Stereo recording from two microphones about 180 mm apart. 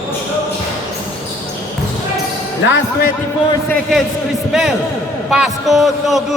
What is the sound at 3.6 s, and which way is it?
A man's voice, 5° left (ahead or behind).